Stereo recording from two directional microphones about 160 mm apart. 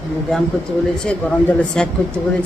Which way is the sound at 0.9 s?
5° left (ahead or behind).